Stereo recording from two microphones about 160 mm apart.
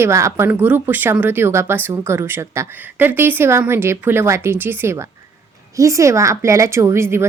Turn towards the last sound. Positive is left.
turn(degrees=-15)  # may be behind; listen again after turning